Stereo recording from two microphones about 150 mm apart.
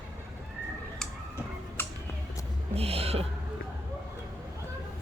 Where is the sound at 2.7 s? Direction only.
40° right (ahead or behind).